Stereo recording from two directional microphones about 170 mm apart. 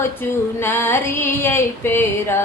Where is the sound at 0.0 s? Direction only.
15° left (ahead or behind).